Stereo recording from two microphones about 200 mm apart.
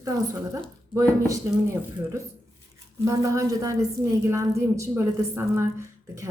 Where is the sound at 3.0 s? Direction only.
15° right (ahead or behind).